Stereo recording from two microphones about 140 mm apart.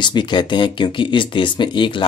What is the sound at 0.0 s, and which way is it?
Speech, 35° left (ahead or behind).